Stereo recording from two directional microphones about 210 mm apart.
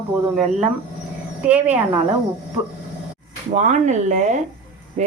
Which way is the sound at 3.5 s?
35° right (ahead or behind).